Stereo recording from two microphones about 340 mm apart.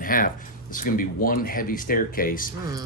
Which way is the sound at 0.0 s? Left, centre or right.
Left.